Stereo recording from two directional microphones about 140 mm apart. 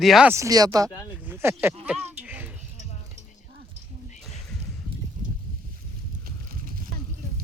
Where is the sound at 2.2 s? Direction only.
10° right (ahead or behind).